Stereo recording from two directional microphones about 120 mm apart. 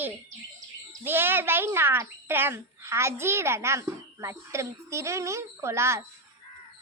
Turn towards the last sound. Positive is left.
turn(degrees=-20)  # may be behind; listen again after turning